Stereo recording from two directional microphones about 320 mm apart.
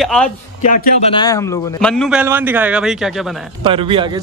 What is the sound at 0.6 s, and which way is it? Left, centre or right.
Speech, left.